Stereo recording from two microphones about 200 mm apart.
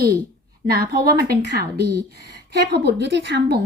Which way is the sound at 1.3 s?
55° right (ahead or behind).